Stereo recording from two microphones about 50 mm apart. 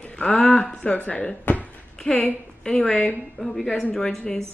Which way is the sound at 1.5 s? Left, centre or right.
Left.